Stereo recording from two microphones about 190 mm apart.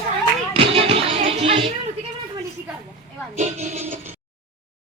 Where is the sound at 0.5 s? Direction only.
30° right (ahead or behind).